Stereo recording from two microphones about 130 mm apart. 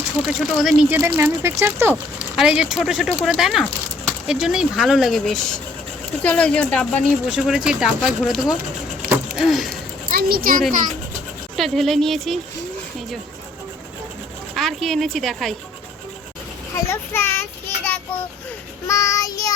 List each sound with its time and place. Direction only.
0.3 s speech: centre (ahead or behind)
0.9 s speech: 20° right (ahead or behind)
2.3 s speech: 5° right (ahead or behind)
7.3 s speech: 5° right (ahead or behind)
9.0 s a sound: 5° right (ahead or behind)
10.1 s speech: 90° right
11.5 s speech: centre (ahead or behind)
14.5 s speech: centre (ahead or behind)
16.7 s a child's voice: 20° left (ahead or behind)
17.8 s child singing: 10° left (ahead or behind)
18.9 s child singing: 25° left (ahead or behind)